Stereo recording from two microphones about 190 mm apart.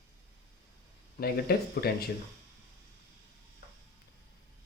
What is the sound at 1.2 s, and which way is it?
Speech, 55° left (ahead or behind).